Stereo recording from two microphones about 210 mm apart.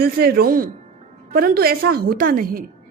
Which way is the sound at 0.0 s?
45° right (ahead or behind).